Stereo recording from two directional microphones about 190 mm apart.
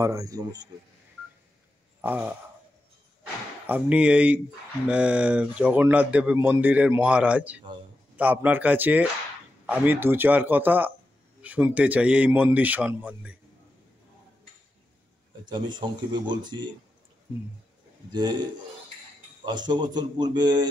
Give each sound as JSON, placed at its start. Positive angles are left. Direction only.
{"t": 0.0, "sound": "a man's voice", "side_deg": -15}
{"t": 2.0, "sound": "a sound", "side_deg": -10}
{"t": 3.6, "sound": "a man's voice", "side_deg": -10}
{"t": 15.4, "sound": "a man's voice", "side_deg": -25}
{"t": 19.4, "sound": "a man's voice", "side_deg": -20}